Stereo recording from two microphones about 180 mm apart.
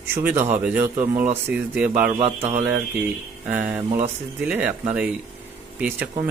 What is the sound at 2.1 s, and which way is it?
Speech, 30° right (ahead or behind).